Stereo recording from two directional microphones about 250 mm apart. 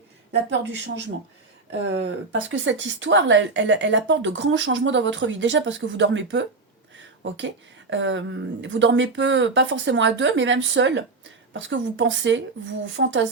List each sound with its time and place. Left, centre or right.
1.7 s speech: right